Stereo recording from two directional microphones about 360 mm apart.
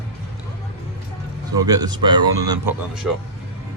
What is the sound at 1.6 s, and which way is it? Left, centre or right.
Speech, centre.